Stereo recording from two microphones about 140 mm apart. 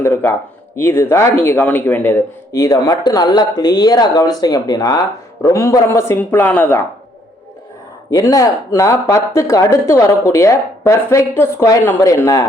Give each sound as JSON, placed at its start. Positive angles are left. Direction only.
{"t": 0.0, "sound": "a sound", "side_deg": 15}
{"t": 0.8, "sound": "speech", "side_deg": 15}
{"t": 8.1, "sound": "speech", "side_deg": 25}